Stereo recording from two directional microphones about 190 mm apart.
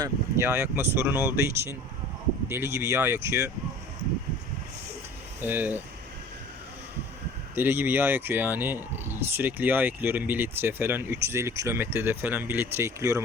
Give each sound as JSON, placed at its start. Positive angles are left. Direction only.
{"t": 0.0, "sound": "speech", "side_deg": -15}
{"t": 5.4, "sound": "speech", "side_deg": -10}
{"t": 7.5, "sound": "speech", "side_deg": -10}